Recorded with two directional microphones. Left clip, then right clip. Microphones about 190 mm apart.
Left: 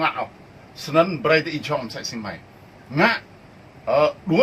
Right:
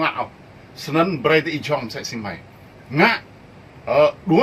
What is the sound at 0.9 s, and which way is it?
Speech, 20° right (ahead or behind).